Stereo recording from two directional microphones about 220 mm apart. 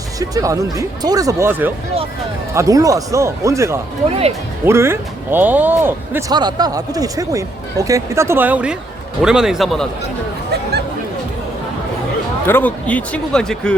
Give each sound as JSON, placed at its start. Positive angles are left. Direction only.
{"t": 0.2, "sound": "speech", "side_deg": -15}
{"t": 10.5, "sound": "speech", "side_deg": -45}
{"t": 12.5, "sound": "speech", "side_deg": 10}